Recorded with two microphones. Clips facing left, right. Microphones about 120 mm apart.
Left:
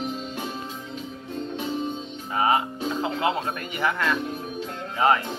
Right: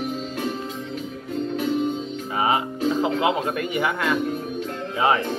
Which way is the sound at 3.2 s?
15° right (ahead or behind).